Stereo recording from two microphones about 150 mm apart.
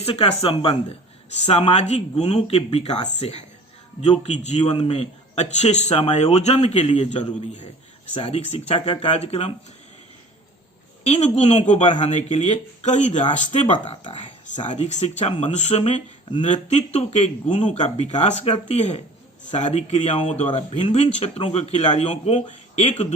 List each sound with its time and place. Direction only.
0.0 s a man's voice: 45° left (ahead or behind)
11.0 s a man's voice: 45° left (ahead or behind)
13.8 s speech: 35° left (ahead or behind)
14.6 s a man's voice: 50° left (ahead or behind)
15.4 s a man's voice: 50° left (ahead or behind)